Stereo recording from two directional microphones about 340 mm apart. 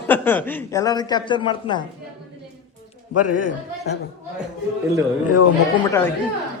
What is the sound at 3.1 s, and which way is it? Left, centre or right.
Speech, left.